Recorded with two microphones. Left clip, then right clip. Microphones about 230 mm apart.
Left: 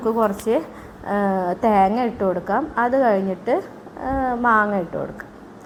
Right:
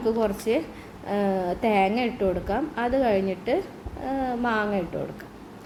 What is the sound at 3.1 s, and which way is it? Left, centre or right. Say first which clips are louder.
Speech: left 4 dB; left.